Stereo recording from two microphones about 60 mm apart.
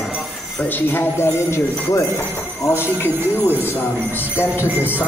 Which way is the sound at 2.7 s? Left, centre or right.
Left.